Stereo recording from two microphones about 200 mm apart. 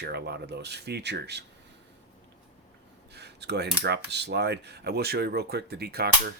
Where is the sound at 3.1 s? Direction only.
55° right (ahead or behind).